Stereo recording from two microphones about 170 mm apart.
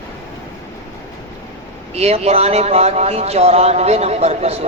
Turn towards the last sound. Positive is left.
turn(degrees=-40)  # may be behind; listen again after turning